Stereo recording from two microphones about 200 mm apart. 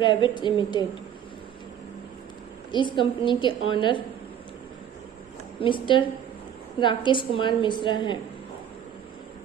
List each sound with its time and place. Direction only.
0.0 s a woman's voice: 25° left (ahead or behind)
2.7 s a woman's voice: 25° left (ahead or behind)
5.6 s a woman's voice: 25° left (ahead or behind)